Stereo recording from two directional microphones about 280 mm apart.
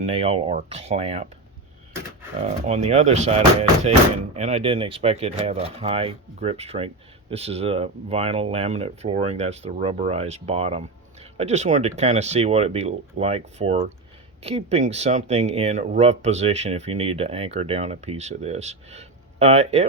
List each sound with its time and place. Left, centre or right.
0.0 s speech: right
2.5 s speech: right